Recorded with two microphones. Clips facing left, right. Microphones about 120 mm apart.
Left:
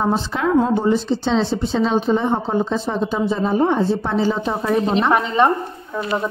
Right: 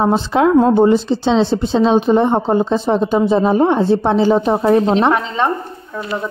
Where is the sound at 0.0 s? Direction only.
75° right (ahead or behind).